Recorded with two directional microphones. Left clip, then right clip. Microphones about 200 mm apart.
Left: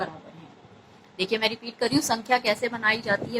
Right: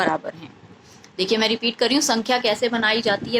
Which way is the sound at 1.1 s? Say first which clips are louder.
Right 5 dB; 20° right (ahead or behind).